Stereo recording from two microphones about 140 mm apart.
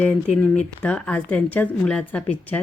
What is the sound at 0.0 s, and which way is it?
A woman's voice, 5° left (ahead or behind).